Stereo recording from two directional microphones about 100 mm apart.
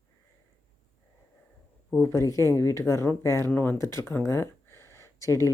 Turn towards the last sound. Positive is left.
turn(degrees=30)  # may be behind; listen again after turning